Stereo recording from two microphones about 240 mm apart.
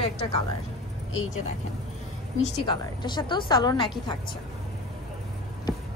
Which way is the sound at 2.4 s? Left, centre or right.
Centre.